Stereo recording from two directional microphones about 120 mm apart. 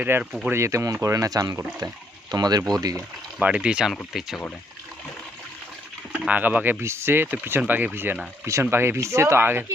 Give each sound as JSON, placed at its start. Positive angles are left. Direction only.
{"t": 0.0, "sound": "speech", "side_deg": -10}
{"t": 0.4, "sound": "speech", "side_deg": -20}
{"t": 3.3, "sound": "speech", "side_deg": -10}
{"t": 6.2, "sound": "speech", "side_deg": -15}